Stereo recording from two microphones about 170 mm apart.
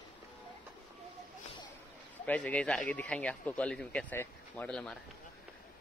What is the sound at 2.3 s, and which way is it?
Speech, 10° left (ahead or behind).